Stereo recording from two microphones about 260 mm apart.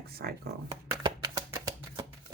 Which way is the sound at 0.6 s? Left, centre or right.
Centre.